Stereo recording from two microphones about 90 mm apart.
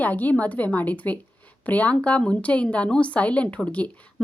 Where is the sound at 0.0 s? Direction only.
20° left (ahead or behind).